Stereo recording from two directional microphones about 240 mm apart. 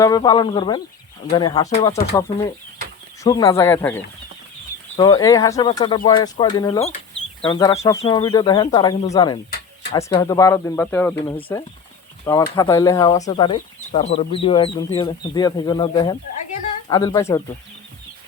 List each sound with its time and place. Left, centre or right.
0.0 s speech: centre
3.2 s speech: centre